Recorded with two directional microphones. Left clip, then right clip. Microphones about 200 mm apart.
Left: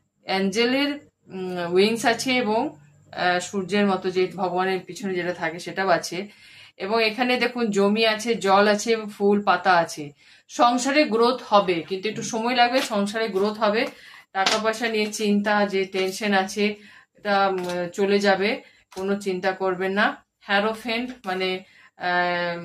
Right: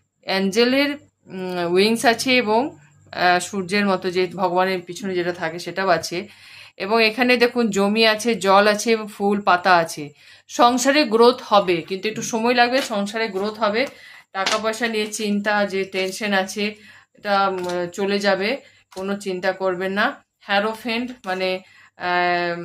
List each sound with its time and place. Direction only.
0.3 s speech: 40° right (ahead or behind)